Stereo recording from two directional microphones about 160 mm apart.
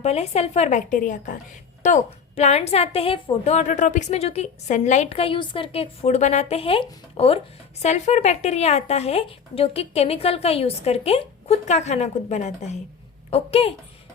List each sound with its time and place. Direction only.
0.0 s a woman's voice: 40° left (ahead or behind)